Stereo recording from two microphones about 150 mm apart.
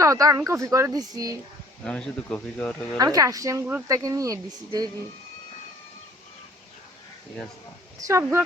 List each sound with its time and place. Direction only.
0.0 s speech: 20° right (ahead or behind)
1.8 s speech: 5° left (ahead or behind)
3.0 s speech: 25° right (ahead or behind)
8.0 s speech: 20° right (ahead or behind)